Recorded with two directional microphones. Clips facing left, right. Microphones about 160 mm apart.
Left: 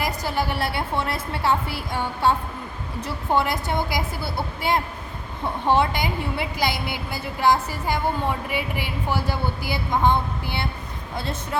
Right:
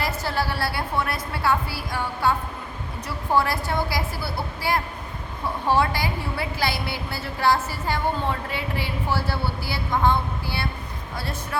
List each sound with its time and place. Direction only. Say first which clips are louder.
0.0 s a woman's voice: left 1 dB; 15° left (ahead or behind)